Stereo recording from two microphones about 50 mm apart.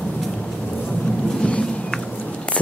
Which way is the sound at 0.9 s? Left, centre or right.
Centre.